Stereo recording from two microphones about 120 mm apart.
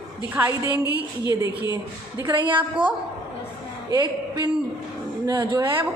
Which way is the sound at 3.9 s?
35° right (ahead or behind).